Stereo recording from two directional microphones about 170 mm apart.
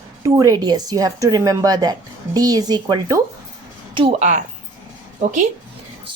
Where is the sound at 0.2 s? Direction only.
20° right (ahead or behind).